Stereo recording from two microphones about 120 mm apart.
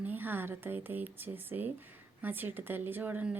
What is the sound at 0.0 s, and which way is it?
Speech, 15° right (ahead or behind).